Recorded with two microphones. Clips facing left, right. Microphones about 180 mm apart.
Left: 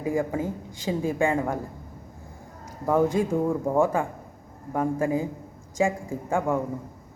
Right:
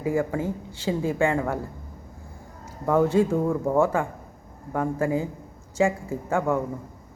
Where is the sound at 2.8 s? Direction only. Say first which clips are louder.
Right 2 dB; 10° left (ahead or behind).